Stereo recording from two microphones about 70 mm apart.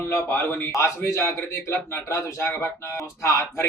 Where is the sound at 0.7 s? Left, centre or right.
Left.